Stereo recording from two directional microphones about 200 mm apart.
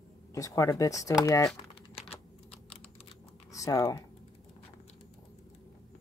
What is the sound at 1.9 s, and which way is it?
Typing, 30° left (ahead or behind).